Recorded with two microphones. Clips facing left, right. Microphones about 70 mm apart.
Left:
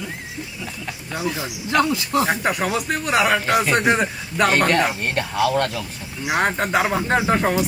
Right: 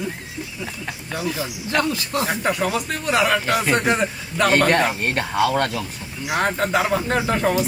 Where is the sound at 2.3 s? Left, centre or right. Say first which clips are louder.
Even; centre.